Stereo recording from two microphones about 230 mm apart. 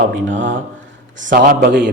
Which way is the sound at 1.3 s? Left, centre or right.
Right.